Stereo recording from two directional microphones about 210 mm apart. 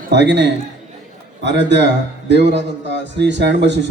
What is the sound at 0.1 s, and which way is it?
A man's voice, 55° right (ahead or behind).